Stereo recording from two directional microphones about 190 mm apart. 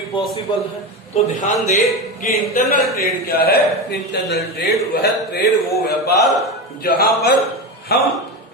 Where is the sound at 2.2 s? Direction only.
50° left (ahead or behind).